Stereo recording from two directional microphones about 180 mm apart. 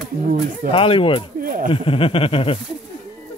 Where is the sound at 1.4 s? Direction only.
50° right (ahead or behind).